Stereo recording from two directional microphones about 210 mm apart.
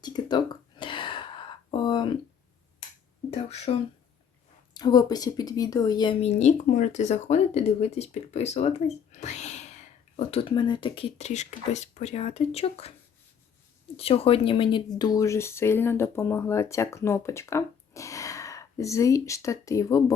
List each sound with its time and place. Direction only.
0.0 s a sound: 20° left (ahead or behind)
3.2 s speech: 30° left (ahead or behind)
13.9 s speech: 25° left (ahead or behind)